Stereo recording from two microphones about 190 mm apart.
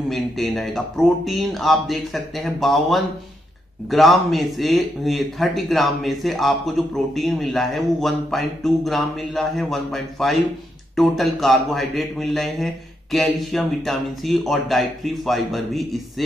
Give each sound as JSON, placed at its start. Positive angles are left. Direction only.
{"t": 0.1, "sound": "a man's voice", "side_deg": 0}